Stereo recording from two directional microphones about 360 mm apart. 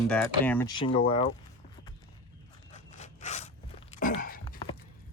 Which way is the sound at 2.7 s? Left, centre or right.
Centre.